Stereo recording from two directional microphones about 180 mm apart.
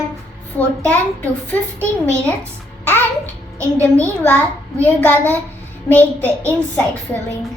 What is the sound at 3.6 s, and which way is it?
Speech, 15° right (ahead or behind).